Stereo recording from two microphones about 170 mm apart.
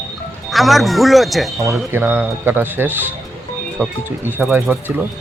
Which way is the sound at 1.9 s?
10° right (ahead or behind).